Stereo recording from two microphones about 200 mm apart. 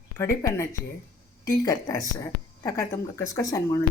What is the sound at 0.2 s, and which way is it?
Speech, 15° left (ahead or behind).